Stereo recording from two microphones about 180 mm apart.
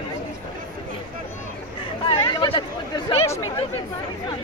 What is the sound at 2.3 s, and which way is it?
Chatter, 25° left (ahead or behind).